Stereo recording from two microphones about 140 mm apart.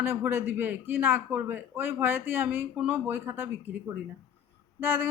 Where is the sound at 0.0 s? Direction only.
15° right (ahead or behind).